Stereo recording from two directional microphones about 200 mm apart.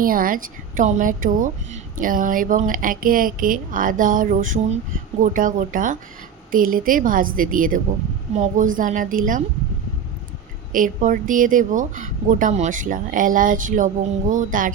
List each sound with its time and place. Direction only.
0.0 s a woman's voice: 45° right (ahead or behind)
10.7 s a woman's voice: 40° right (ahead or behind)